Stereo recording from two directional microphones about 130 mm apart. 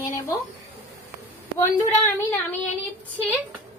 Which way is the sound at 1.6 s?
20° left (ahead or behind).